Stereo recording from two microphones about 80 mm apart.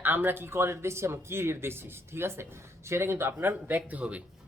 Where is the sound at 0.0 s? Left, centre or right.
Right.